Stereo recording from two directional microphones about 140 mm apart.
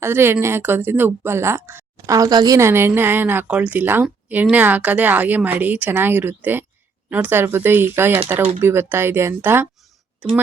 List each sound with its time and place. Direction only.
0.0 s speech: 15° right (ahead or behind)